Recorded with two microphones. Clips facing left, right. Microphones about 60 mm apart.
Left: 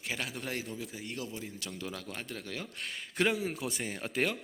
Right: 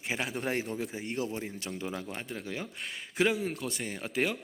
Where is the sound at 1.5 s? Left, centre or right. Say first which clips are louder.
Right 4 dB; right.